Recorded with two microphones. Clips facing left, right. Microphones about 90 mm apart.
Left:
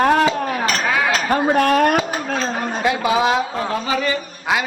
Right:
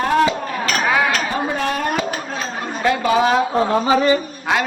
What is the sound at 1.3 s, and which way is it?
Speech, 55° left (ahead or behind).